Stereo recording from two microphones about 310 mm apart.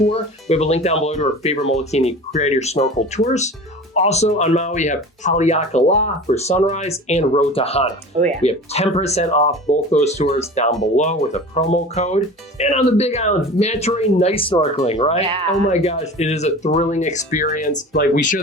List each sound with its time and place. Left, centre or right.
0.1 s speech: left
8.1 s speech: right
8.4 s speech: centre